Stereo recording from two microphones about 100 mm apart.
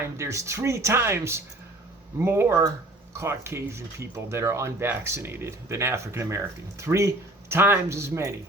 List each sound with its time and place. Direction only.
0.0 s speech: 30° right (ahead or behind)